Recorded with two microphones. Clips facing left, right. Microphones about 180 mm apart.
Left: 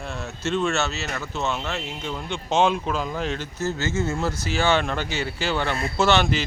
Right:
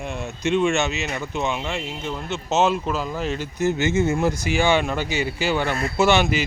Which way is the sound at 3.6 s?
15° right (ahead or behind).